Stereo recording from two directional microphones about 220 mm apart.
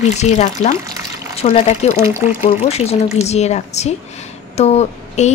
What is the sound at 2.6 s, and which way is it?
A woman's voice, 30° left (ahead or behind).